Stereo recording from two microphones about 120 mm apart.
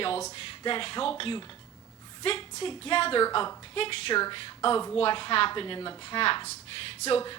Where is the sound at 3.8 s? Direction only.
50° left (ahead or behind).